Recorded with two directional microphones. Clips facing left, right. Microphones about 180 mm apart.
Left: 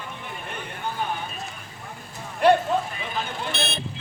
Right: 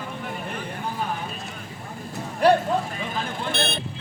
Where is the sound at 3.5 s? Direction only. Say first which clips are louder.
Right 4 dB; 55° right (ahead or behind).